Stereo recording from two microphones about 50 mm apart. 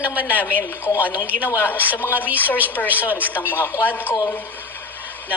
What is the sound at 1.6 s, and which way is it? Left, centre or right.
A woman's voice, left.